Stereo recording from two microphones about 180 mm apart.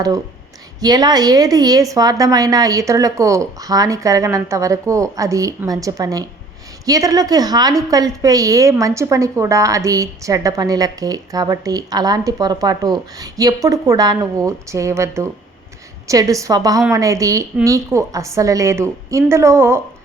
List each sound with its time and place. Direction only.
0.8 s a woman's voice: 20° right (ahead or behind)